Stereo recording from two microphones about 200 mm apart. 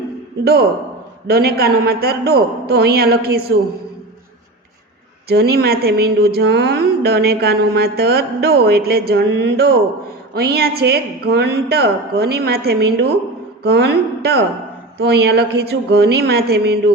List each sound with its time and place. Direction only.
1.3 s speech: 50° right (ahead or behind)
5.3 s a woman's voice: 55° right (ahead or behind)